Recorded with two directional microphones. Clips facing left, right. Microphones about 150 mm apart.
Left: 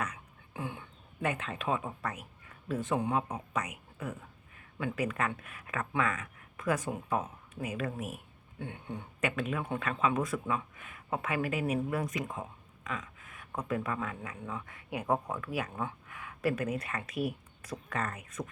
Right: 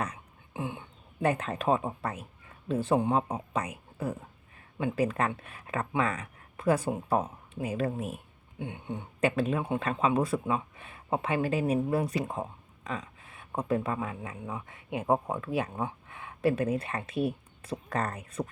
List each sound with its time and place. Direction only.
0.0 s beatboxing: 25° right (ahead or behind)
1.2 s speech: 35° right (ahead or behind); by 9.3 s 20° right (ahead or behind)
9.3 s speech: 30° right (ahead or behind)